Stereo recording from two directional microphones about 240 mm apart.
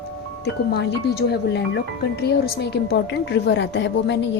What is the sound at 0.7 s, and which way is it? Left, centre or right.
Speech, left.